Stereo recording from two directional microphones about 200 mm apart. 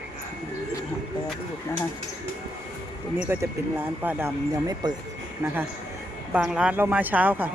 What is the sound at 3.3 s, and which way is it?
Speech, 10° right (ahead or behind).